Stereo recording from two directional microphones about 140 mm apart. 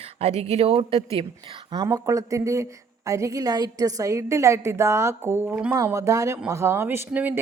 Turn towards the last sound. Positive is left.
turn(degrees=-10)  # may be behind; listen again after turning